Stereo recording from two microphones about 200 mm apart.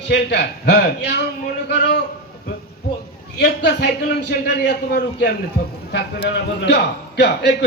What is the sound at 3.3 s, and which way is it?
A man's voice, 55° left (ahead or behind).